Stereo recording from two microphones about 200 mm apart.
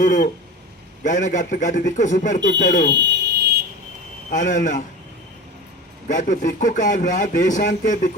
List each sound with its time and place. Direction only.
0.0 s a sound: 45° left (ahead or behind)
1.0 s a man's voice: 40° left (ahead or behind)
2.9 s alarm: 60° right (ahead or behind)
4.3 s a man's voice: 40° left (ahead or behind)
6.1 s a man's voice: 40° left (ahead or behind)